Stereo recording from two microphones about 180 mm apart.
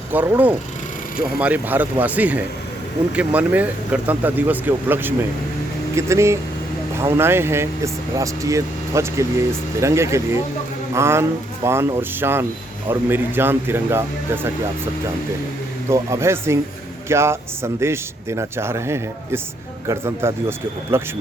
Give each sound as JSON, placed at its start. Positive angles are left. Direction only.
{"t": 0.1, "sound": "speech", "side_deg": -10}
{"t": 15.9, "sound": "speech", "side_deg": -15}